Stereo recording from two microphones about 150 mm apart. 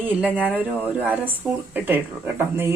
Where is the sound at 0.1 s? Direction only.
10° right (ahead or behind).